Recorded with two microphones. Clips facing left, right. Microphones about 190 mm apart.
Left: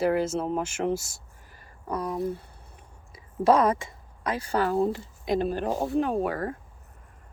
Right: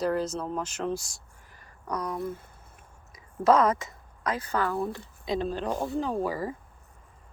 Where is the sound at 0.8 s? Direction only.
5° left (ahead or behind).